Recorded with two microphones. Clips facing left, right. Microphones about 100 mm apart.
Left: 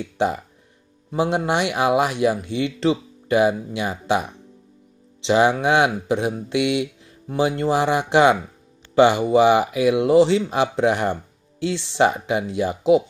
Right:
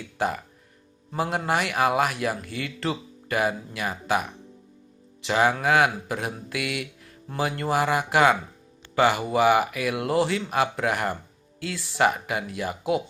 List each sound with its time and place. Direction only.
1.1 s speech: 20° left (ahead or behind)